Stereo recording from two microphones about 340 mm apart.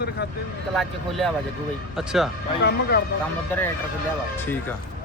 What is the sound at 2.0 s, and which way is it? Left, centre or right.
Speech, centre.